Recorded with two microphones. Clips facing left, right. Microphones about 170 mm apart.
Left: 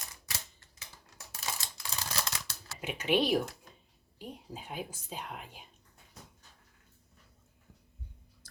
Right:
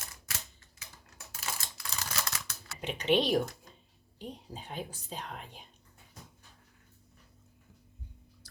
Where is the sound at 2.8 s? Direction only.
5° left (ahead or behind).